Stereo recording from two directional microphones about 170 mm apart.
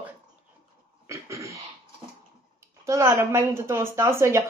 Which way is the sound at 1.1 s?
15° right (ahead or behind).